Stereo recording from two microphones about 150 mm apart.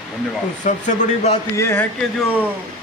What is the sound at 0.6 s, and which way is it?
Speech, 55° left (ahead or behind).